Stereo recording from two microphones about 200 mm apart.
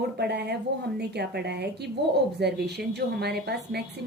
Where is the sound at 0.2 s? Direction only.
55° right (ahead or behind).